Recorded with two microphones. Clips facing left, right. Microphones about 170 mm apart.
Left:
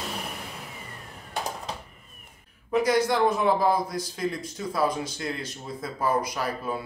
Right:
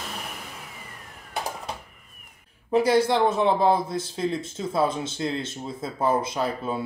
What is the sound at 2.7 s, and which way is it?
Speech, 30° right (ahead or behind).